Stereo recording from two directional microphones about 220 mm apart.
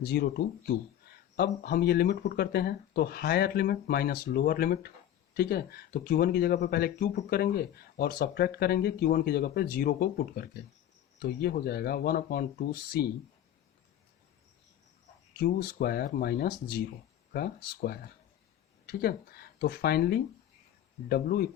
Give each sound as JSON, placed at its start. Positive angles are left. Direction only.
{"t": 0.0, "sound": "speech", "side_deg": 50}
{"t": 15.4, "sound": "speech", "side_deg": 45}